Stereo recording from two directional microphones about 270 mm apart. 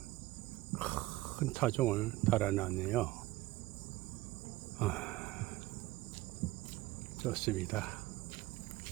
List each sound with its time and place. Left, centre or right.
0.8 s speech: centre
4.8 s a sound: centre
7.3 s speech: centre